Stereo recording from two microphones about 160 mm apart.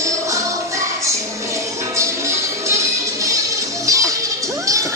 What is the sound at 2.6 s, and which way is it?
Music, 20° right (ahead or behind).